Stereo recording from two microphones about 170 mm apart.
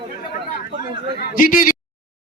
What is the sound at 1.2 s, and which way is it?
Speech, 55° left (ahead or behind).